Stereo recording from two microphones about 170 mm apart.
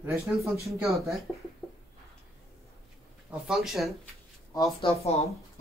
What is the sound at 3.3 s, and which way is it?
Speech, centre (ahead or behind).